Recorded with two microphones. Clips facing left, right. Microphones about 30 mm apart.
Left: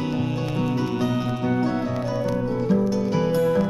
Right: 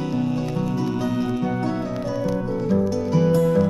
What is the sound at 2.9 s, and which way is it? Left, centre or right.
Music, centre.